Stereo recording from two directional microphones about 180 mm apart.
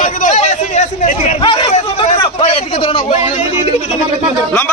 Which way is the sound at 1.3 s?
30° left (ahead or behind).